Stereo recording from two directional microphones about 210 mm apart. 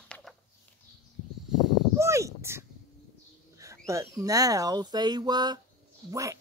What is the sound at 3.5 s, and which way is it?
Bird, 15° right (ahead or behind).